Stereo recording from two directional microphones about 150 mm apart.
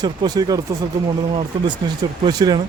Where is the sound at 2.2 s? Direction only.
30° right (ahead or behind).